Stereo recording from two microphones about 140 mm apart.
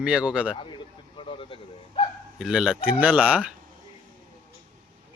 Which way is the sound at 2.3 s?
5° right (ahead or behind).